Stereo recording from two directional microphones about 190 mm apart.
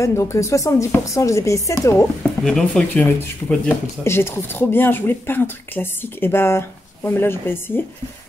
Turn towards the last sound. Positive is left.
turn(degrees=10)  # may be behind; listen again after turning